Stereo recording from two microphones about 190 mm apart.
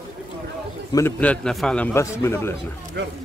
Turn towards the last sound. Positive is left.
turn(degrees=-70)  # may be behind; listen again after turning